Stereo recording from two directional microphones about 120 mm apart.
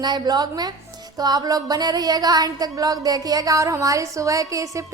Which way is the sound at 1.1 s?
35° right (ahead or behind).